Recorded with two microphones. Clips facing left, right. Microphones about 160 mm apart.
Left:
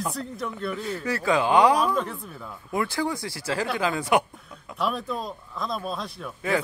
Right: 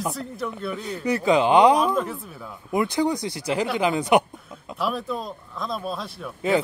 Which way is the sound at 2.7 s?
20° right (ahead or behind).